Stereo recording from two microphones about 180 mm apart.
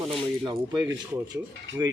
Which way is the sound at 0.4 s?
25° right (ahead or behind).